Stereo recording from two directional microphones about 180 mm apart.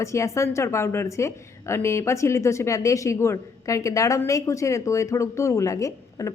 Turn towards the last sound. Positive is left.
turn(degrees=20)  # may be behind; listen again after turning